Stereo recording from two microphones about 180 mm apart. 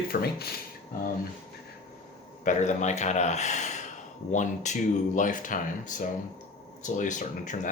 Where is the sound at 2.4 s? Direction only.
45° left (ahead or behind).